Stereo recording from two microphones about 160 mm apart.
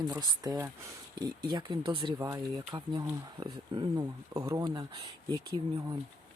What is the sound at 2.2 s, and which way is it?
Speech, 20° right (ahead or behind).